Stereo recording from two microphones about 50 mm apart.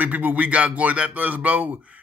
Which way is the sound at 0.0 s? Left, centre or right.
Right.